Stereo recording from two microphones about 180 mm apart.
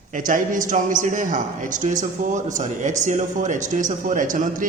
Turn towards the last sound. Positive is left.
turn(degrees=-45)  # may be behind; listen again after turning